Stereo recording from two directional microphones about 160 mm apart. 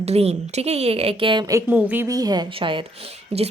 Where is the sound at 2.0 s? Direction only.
25° right (ahead or behind); by 3.5 s 40° right (ahead or behind).